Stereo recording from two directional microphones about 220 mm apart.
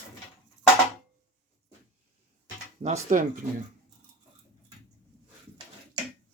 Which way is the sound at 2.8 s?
35° right (ahead or behind).